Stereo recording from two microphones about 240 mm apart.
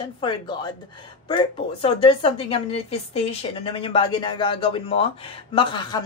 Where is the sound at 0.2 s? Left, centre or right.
Centre.